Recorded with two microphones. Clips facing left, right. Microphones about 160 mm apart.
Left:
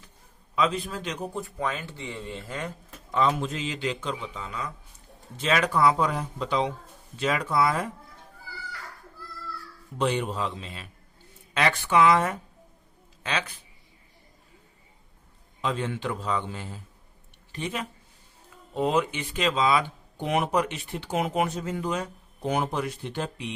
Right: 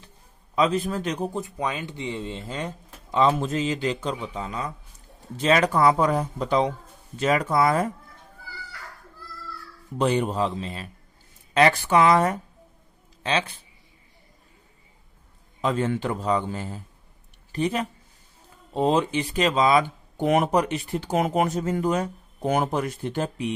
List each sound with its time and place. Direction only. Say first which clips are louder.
0.5 s a man's voice: right 4 dB; 40° right (ahead or behind)
1.3 s speech: right 2 dB; 20° right (ahead or behind)
3.2 s a man's voice: right 5 dB; 40° right (ahead or behind)
10.0 s a man's voice: right 4 dB; 40° right (ahead or behind)
15.6 s speech: right 5 dB; 45° right (ahead or behind)